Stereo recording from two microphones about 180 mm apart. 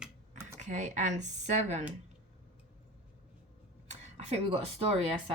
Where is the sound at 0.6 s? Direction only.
40° right (ahead or behind).